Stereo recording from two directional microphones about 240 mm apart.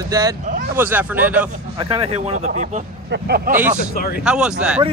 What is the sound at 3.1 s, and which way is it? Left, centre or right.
Speech, right.